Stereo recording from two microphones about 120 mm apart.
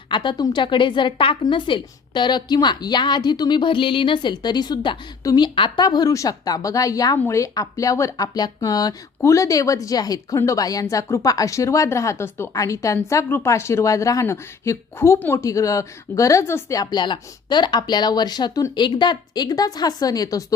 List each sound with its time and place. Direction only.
0.1 s a woman's voice: 40° left (ahead or behind)